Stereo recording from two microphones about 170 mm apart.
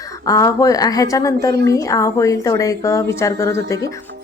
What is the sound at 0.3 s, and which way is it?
A woman's voice, 20° left (ahead or behind).